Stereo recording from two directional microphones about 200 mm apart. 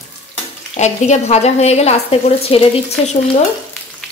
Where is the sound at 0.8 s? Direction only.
35° left (ahead or behind).